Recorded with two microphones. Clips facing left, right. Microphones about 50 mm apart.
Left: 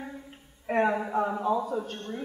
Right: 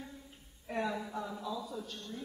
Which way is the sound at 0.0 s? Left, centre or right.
Left.